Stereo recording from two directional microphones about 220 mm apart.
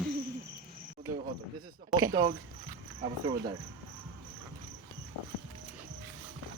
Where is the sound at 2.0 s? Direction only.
15° right (ahead or behind).